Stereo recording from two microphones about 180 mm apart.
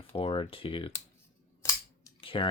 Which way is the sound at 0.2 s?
30° left (ahead or behind).